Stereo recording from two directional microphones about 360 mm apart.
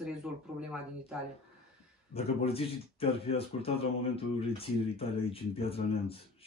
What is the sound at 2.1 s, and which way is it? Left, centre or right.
Speech, centre.